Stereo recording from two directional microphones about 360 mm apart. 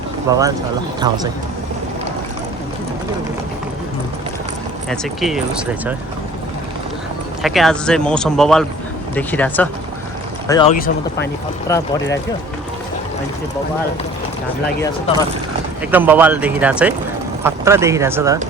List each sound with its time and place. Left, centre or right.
0.3 s speech: centre
4.9 s speech: centre
7.4 s speech: centre
10.5 s speech: centre
11.7 s speech: centre
15.9 s speech: centre